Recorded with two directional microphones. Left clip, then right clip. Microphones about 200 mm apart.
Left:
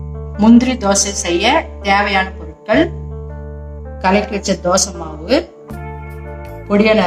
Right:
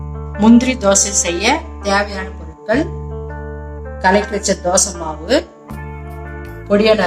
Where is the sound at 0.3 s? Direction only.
5° right (ahead or behind).